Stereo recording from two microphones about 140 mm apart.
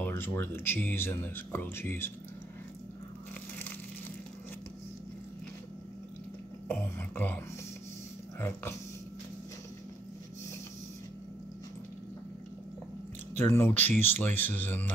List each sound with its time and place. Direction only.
0.0 s speech: 15° left (ahead or behind)
6.7 s speech: 15° left (ahead or behind)
8.4 s speech: 15° left (ahead or behind)
13.4 s speech: 15° left (ahead or behind)